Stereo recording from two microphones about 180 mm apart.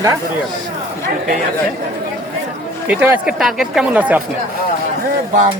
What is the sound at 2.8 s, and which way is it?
Speech, 10° right (ahead or behind).